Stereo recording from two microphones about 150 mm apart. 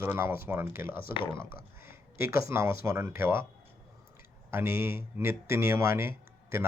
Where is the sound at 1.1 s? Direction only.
35° left (ahead or behind).